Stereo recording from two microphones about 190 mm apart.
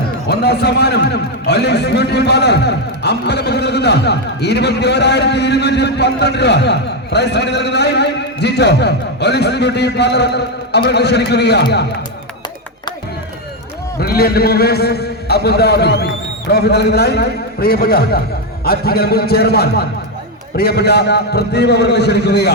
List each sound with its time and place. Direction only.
0.3 s a man's voice: 60° left (ahead or behind)
14.0 s a man's voice: 55° left (ahead or behind)